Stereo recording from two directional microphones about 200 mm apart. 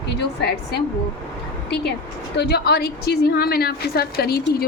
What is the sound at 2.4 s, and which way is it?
A woman's voice, 55° left (ahead or behind).